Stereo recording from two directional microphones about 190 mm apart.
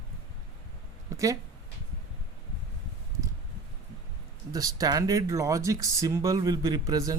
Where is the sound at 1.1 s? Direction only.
15° right (ahead or behind).